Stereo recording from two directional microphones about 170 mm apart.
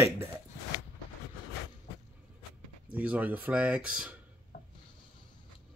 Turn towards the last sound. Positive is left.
turn(degrees=-5)  # may be behind; listen again after turning